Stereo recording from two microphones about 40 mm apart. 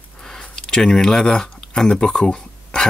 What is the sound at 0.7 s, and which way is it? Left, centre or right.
Speech, centre.